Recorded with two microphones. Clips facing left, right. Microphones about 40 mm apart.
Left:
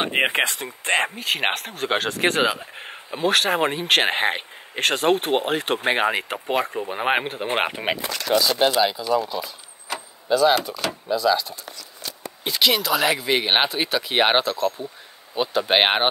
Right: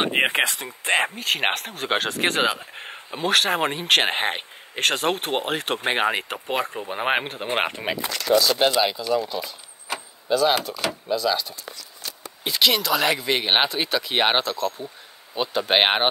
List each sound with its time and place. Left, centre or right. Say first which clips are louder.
0.0 s speech: even; centre
7.9 s speech: left 2 dB; left
8.5 s speech: left 1 dB; centre
8.9 s speech: left 1 dB; centre
9.9 s vehicle: left 2 dB; centre
10.7 s speech: even; centre